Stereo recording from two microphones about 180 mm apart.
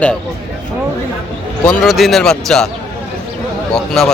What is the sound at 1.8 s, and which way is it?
Speech, centre (ahead or behind).